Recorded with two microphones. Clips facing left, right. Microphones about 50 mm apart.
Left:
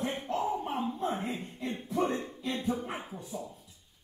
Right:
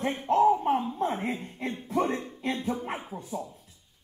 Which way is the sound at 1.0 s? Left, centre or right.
Right.